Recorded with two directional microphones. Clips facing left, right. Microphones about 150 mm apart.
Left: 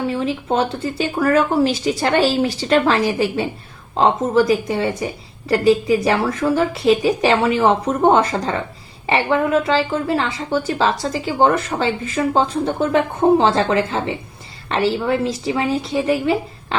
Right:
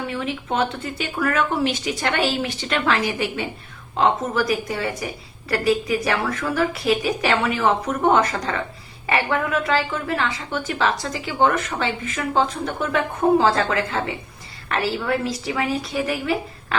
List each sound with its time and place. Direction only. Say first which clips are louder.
0.1 s a woman's voice: left 5 dB; 30° left (ahead or behind)